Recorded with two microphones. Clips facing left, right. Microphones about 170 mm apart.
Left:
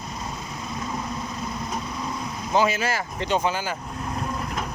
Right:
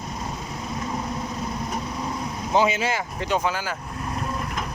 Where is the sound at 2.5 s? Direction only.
20° right (ahead or behind).